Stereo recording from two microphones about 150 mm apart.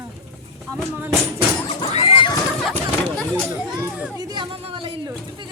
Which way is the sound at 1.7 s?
40° left (ahead or behind).